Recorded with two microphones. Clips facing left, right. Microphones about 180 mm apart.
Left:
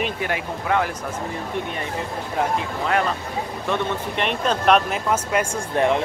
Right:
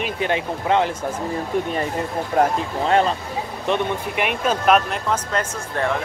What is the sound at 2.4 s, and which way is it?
Speech, 45° right (ahead or behind).